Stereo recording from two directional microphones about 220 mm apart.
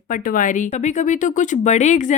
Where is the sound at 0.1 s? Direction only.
35° left (ahead or behind).